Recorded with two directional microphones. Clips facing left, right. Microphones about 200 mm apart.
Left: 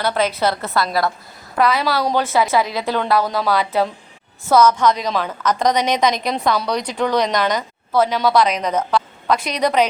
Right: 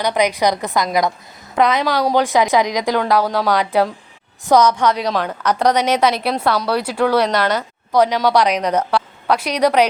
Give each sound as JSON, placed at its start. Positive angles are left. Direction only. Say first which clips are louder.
{"t": 0.0, "sound": "a woman's voice", "louder": "right 2 dB", "side_deg": -15}
{"t": 7.3, "sound": "speech", "louder": "right 1 dB", "side_deg": 10}
{"t": 7.9, "sound": "a woman's voice", "louder": "right 1 dB", "side_deg": -10}